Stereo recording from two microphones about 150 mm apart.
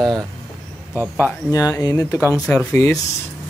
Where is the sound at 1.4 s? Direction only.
20° left (ahead or behind).